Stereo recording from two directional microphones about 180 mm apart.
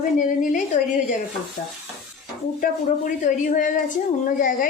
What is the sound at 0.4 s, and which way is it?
Speech, 45° left (ahead or behind).